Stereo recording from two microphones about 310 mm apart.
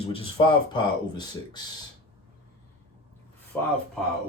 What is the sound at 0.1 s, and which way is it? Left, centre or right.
Speech, centre.